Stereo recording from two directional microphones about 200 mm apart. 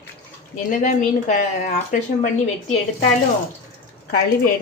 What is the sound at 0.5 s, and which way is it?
A woman's voice, 35° left (ahead or behind).